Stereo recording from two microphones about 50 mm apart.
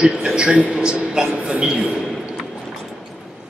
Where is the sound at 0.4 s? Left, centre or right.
Right.